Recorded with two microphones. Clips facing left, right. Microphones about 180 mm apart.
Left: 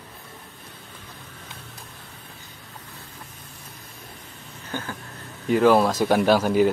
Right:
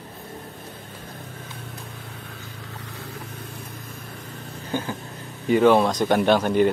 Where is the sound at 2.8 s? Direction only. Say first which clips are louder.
Right 5 dB; 75° right (ahead or behind).